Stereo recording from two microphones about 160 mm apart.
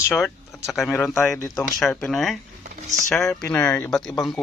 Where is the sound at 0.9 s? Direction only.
15° left (ahead or behind).